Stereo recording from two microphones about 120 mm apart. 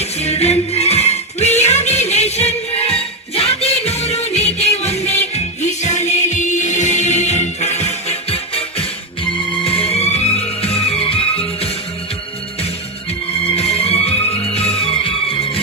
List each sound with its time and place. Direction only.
0.0 s music: 60° left (ahead or behind)
13.4 s music: 55° left (ahead or behind)